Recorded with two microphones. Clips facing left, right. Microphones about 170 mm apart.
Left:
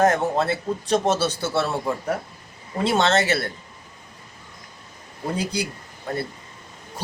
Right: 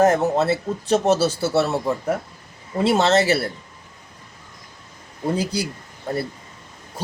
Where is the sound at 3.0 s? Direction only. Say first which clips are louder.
Right 2 dB; 30° right (ahead or behind).